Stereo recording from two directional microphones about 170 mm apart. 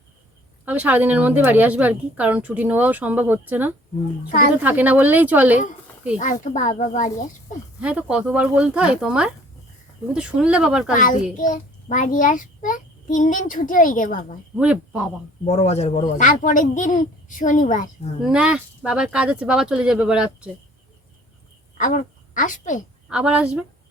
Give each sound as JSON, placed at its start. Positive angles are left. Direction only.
{"t": 0.6, "sound": "a woman's voice", "side_deg": -10}
{"t": 6.1, "sound": "a child's voice", "side_deg": 45}
{"t": 7.8, "sound": "speech", "side_deg": -5}
{"t": 10.9, "sound": "a child's voice", "side_deg": 50}
{"t": 14.6, "sound": "speech", "side_deg": -5}
{"t": 15.4, "sound": "a child's voice", "side_deg": 40}
{"t": 18.3, "sound": "speech", "side_deg": -5}
{"t": 21.8, "sound": "a woman's voice", "side_deg": 50}
{"t": 23.0, "sound": "speech", "side_deg": -5}